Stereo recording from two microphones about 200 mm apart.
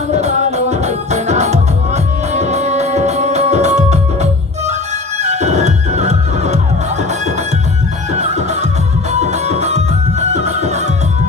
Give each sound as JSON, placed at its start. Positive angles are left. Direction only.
{"t": 0.1, "sound": "music", "side_deg": -35}
{"t": 8.1, "sound": "music", "side_deg": -35}